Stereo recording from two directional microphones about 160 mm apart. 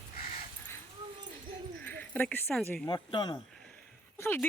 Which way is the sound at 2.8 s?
30° left (ahead or behind).